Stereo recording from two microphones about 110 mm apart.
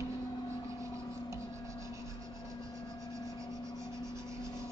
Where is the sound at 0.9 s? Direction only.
30° right (ahead or behind).